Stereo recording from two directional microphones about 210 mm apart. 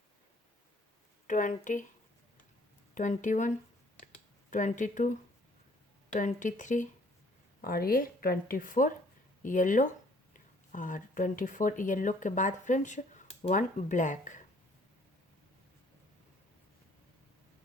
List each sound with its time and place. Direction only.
1.3 s speech: 35° left (ahead or behind)
2.9 s speech: 35° left (ahead or behind)
4.5 s speech: 35° left (ahead or behind)
6.1 s speech: 35° left (ahead or behind)